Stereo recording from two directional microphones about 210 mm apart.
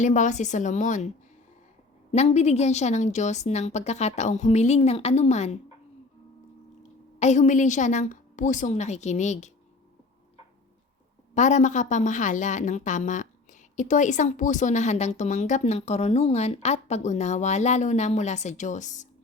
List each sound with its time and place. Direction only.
0.0 s a woman's voice: 35° left (ahead or behind)
2.1 s a woman's voice: 30° left (ahead or behind)
7.2 s a woman's voice: 35° left (ahead or behind)
11.3 s a woman's voice: 35° left (ahead or behind)